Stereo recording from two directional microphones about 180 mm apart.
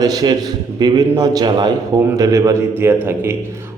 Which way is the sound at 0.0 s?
20° right (ahead or behind).